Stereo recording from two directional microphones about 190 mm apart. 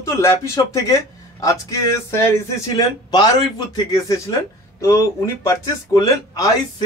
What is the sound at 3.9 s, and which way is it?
Speech, 20° left (ahead or behind).